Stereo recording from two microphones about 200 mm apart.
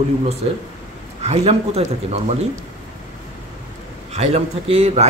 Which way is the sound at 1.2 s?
30° right (ahead or behind).